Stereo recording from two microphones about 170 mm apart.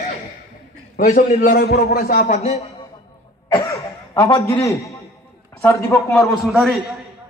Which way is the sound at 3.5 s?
20° left (ahead or behind).